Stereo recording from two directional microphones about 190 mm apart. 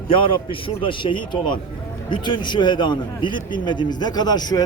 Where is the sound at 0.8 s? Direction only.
25° left (ahead or behind).